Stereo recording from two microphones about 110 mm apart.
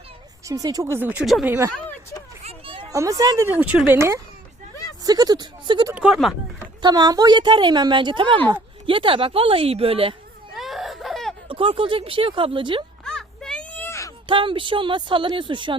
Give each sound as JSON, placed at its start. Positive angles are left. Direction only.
{"t": 0.4, "sound": "speech", "side_deg": -35}
{"t": 0.9, "sound": "speech", "side_deg": -15}
{"t": 1.2, "sound": "speech", "side_deg": 0}
{"t": 1.5, "sound": "speech", "side_deg": -25}
{"t": 2.9, "sound": "speech", "side_deg": -30}
{"t": 3.6, "sound": "speech", "side_deg": -10}
{"t": 3.9, "sound": "speech", "side_deg": -25}
{"t": 5.9, "sound": "speech", "side_deg": -10}
{"t": 6.8, "sound": "a woman's voice", "side_deg": -35}
{"t": 10.6, "sound": "laughter", "side_deg": 0}
{"t": 11.4, "sound": "a woman's voice", "side_deg": -50}
{"t": 13.1, "sound": "a sound", "side_deg": 5}
{"t": 14.3, "sound": "a woman's voice", "side_deg": -50}